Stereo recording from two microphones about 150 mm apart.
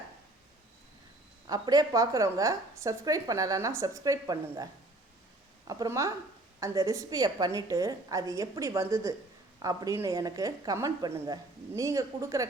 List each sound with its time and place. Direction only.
1.5 s a woman's voice: 25° right (ahead or behind)